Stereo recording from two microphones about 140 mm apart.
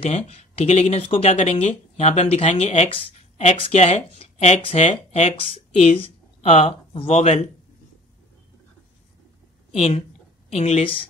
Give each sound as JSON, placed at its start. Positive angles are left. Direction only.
{"t": 0.0, "sound": "speech", "side_deg": 45}
{"t": 9.7, "sound": "a woman's voice", "side_deg": 45}